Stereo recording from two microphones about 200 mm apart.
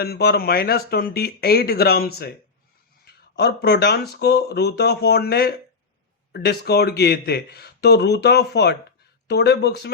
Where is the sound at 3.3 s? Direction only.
60° left (ahead or behind).